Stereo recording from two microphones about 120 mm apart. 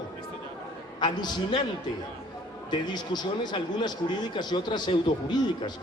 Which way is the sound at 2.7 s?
35° left (ahead or behind).